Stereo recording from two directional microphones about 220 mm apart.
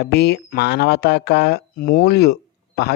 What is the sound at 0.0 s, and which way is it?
Speech, 50° left (ahead or behind).